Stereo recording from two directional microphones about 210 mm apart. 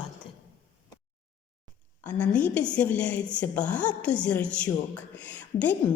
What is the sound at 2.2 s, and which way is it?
A woman's voice, 5° left (ahead or behind).